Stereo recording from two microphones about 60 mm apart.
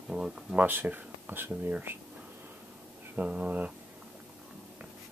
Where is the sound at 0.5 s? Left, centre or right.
Right.